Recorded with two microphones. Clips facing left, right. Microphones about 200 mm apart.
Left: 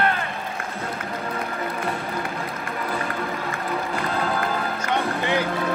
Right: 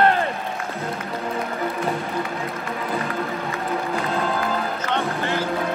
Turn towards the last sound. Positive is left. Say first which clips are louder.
# left 1 dB
turn(degrees=15)  # may be behind; listen again after turning